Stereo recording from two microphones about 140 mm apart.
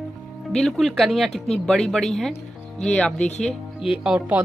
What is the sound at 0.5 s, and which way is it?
Speech, 5° left (ahead or behind).